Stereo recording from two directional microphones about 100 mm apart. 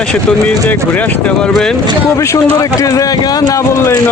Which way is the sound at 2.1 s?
30° left (ahead or behind).